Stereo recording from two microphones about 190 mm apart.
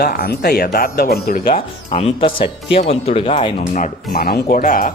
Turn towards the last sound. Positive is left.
turn(degrees=45)  # may be behind; listen again after turning